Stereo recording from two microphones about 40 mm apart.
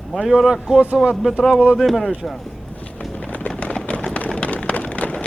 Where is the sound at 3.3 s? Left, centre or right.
Left.